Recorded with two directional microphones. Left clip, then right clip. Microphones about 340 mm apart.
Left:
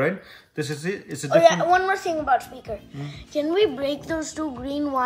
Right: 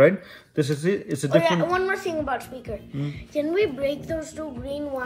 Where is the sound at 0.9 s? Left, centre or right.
Right.